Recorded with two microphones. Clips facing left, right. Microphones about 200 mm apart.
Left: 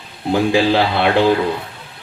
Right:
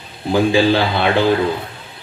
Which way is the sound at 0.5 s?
65° left (ahead or behind).